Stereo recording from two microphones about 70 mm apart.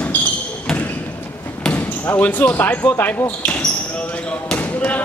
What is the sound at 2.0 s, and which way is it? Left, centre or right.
Speech, left.